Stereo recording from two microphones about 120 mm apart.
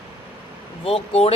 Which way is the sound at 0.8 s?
55° left (ahead or behind).